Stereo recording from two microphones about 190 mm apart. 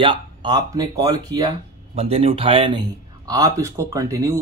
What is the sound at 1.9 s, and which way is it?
Speech, 30° right (ahead or behind).